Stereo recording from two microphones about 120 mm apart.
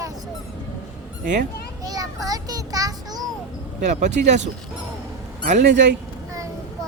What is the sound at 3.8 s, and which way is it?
Speech, 85° right.